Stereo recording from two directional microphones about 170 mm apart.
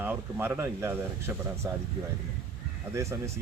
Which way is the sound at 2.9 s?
15° right (ahead or behind).